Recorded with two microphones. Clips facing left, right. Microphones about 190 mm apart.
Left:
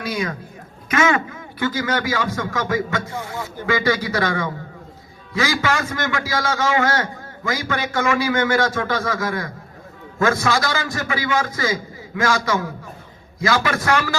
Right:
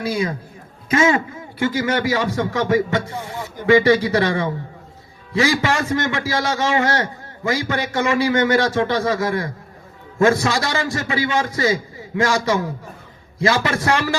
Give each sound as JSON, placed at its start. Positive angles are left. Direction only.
{"t": 0.0, "sound": "a man's voice", "side_deg": -30}